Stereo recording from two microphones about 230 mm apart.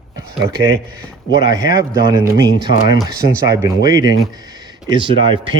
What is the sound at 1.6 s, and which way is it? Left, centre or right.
Speech, centre.